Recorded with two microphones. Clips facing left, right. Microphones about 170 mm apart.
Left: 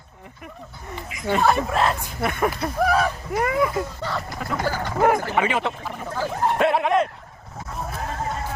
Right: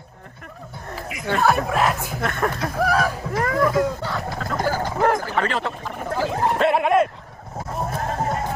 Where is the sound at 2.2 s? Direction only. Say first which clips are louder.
Left 2 dB; 10° left (ahead or behind).